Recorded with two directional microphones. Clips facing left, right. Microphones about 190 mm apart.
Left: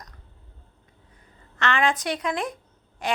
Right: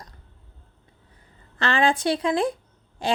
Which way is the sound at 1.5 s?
30° right (ahead or behind).